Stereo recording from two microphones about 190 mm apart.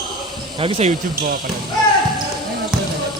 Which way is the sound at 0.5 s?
30° right (ahead or behind).